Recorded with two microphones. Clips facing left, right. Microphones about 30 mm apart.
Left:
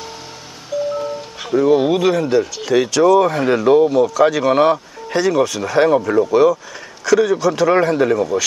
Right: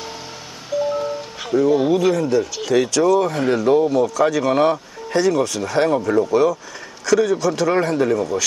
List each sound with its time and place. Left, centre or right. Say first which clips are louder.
0.7 s music: even; centre
1.6 s speech: left 2 dB; centre
3.8 s speech: left 3 dB; centre
5.2 s speech: left 3 dB; centre